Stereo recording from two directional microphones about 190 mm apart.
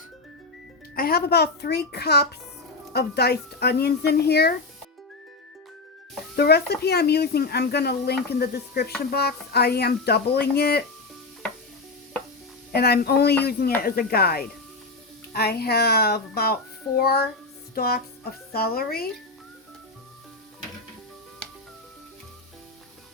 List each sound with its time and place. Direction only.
0.9 s speech: 50° left (ahead or behind)
6.3 s speech: 55° left (ahead or behind)
12.7 s speech: 55° left (ahead or behind)